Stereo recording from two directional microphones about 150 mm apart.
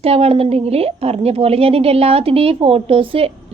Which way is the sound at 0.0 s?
40° right (ahead or behind).